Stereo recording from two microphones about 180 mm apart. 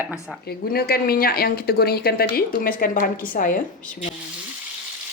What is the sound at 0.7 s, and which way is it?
Speech, 60° left (ahead or behind).